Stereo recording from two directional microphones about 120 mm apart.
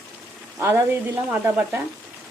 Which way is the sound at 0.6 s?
20° right (ahead or behind).